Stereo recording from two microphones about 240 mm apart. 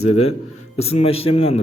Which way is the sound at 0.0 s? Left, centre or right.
Left.